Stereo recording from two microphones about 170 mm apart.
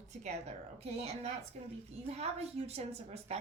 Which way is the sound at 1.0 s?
40° right (ahead or behind).